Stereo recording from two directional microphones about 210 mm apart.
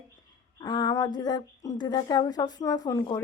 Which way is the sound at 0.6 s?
20° left (ahead or behind).